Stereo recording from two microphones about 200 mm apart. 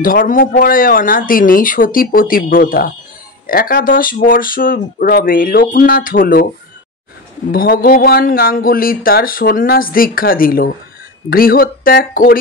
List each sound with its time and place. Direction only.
0.0 s speech: 45° left (ahead or behind)
7.5 s speech: 45° left (ahead or behind)